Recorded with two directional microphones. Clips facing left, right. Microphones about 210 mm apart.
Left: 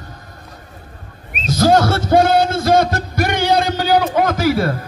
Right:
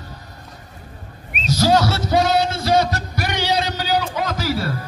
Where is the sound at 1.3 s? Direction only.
50° left (ahead or behind).